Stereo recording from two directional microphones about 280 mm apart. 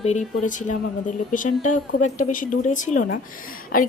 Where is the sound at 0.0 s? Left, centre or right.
Left.